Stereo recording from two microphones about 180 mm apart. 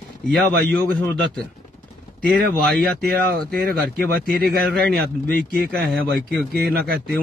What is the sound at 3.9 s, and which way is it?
Speech, 60° right (ahead or behind).